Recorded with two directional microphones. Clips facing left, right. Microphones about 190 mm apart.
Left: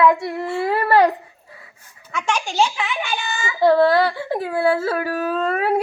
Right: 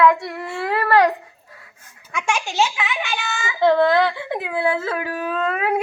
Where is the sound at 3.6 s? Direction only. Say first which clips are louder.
Left 1 dB; 10° left (ahead or behind).